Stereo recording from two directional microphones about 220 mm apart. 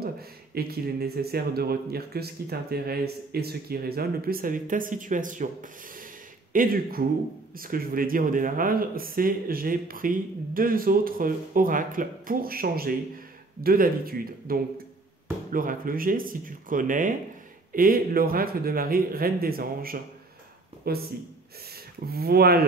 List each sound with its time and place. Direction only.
0.6 s speech: 45° right (ahead or behind)
22.0 s speech: 45° right (ahead or behind)